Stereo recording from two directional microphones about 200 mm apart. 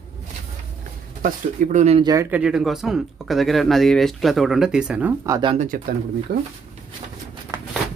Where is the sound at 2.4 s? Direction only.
5° right (ahead or behind); by 5.5 s 20° right (ahead or behind).